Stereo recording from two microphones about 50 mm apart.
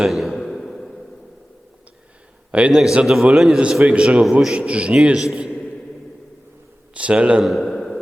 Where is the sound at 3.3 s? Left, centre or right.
Centre.